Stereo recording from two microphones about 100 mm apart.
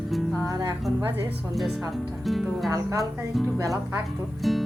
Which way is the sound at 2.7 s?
35° right (ahead or behind).